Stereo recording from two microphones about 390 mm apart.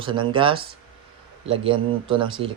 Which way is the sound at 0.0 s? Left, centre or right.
Centre.